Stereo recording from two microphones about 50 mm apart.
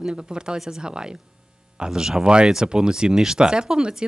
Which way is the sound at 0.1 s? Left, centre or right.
Centre.